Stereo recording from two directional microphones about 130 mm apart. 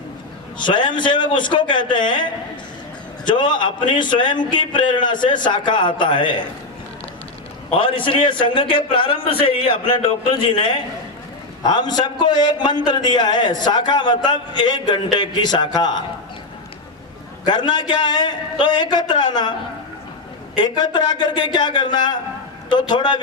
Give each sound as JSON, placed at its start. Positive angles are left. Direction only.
{"t": 0.6, "sound": "a man's voice", "side_deg": 35}
{"t": 7.7, "sound": "a man's voice", "side_deg": 40}
{"t": 17.4, "sound": "a man's voice", "side_deg": 35}
{"t": 20.6, "sound": "a man's voice", "side_deg": 35}